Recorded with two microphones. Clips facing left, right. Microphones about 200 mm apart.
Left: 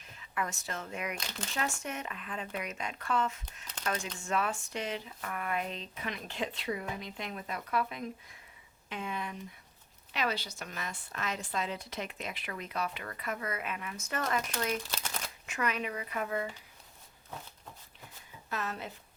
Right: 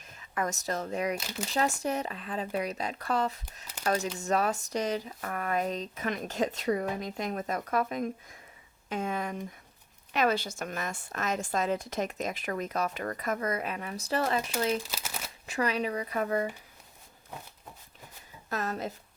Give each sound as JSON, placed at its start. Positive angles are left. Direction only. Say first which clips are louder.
{"t": 0.0, "sound": "speech", "louder": "right 4 dB", "side_deg": -45}
{"t": 14.8, "sound": "speech", "louder": "even", "side_deg": -5}
{"t": 15.4, "sound": "speech", "louder": "right 5 dB", "side_deg": -35}
{"t": 18.4, "sound": "speech", "louder": "right 5 dB", "side_deg": -40}